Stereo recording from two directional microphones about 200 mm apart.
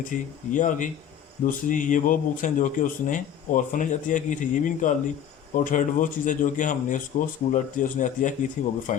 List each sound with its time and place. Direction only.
0.1 s speech: 40° left (ahead or behind)